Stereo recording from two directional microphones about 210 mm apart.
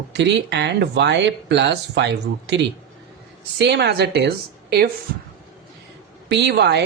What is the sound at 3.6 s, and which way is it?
Speech, 50° right (ahead or behind).